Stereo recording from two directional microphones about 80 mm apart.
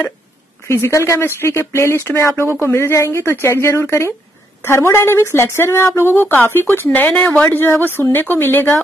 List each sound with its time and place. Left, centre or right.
0.7 s speech: left